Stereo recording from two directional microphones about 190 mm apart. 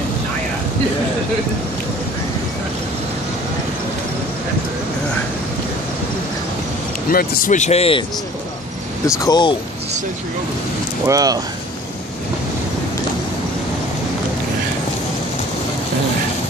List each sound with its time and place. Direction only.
7.1 s speech: 50° left (ahead or behind); by 8.0 s 30° left (ahead or behind)
9.2 s speech: 25° left (ahead or behind)
11.1 s speech: 20° right (ahead or behind)